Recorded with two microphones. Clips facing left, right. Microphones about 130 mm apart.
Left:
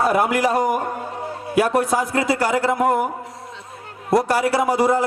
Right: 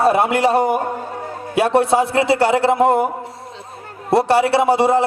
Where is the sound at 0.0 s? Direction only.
25° right (ahead or behind).